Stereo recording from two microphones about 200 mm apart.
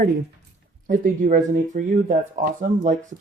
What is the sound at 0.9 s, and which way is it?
Speech, 40° right (ahead or behind).